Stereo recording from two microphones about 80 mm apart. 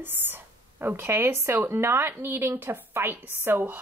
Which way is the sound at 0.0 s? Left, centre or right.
Right.